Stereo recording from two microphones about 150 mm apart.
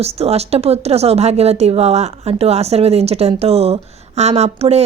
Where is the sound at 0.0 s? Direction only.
45° right (ahead or behind).